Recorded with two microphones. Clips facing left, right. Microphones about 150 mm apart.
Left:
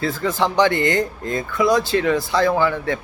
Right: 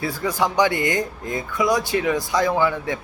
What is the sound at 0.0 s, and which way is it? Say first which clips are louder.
Speech: left 2 dB; 15° right (ahead or behind).